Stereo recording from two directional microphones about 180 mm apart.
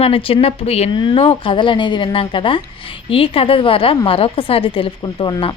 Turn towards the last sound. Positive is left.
turn(degrees=30)  # may be behind; listen again after turning